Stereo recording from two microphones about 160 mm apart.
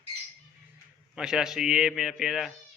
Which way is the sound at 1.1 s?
5° right (ahead or behind).